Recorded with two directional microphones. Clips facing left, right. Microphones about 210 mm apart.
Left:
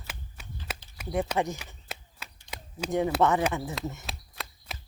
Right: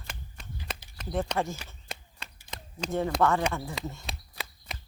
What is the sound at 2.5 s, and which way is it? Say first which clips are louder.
Speech: left 2 dB; 10° left (ahead or behind).